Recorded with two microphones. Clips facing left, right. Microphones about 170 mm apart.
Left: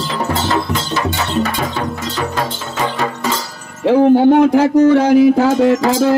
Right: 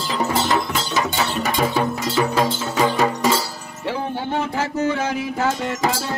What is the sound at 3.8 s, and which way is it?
Music, 70° left (ahead or behind).